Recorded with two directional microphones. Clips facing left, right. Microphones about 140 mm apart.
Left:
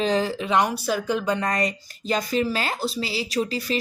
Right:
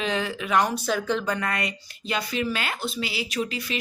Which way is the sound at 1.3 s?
35° left (ahead or behind).